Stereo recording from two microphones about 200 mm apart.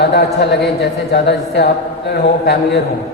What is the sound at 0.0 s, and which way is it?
A woman's voice, 55° left (ahead or behind).